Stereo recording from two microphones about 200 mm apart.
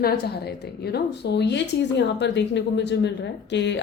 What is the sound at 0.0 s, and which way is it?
A woman's voice, 55° left (ahead or behind).